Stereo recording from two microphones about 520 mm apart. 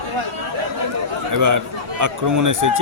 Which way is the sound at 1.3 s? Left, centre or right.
Right.